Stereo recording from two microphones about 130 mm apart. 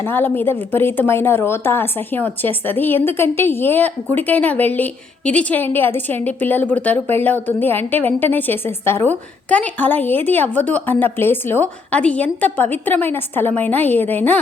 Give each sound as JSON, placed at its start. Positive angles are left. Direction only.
{"t": 0.0, "sound": "a woman's voice", "side_deg": 15}